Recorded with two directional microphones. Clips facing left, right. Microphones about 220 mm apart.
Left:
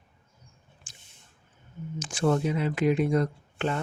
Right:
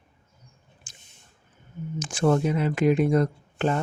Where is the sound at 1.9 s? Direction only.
50° right (ahead or behind).